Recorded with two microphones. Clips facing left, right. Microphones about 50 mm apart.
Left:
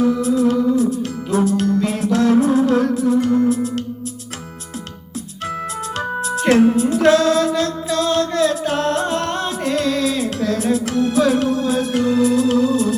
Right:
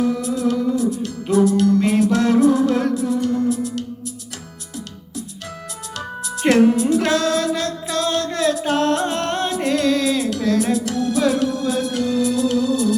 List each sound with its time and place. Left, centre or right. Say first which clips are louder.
0.0 s music: left 4 dB; left
1.8 s music: right 3 dB; right
2.1 s music: left 4 dB; left
6.0 s music: left 2 dB; left
8.4 s music: left 1 dB; right
9.9 s music: right 1 dB; left